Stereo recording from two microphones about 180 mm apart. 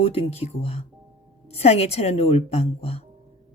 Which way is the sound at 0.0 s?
30° left (ahead or behind).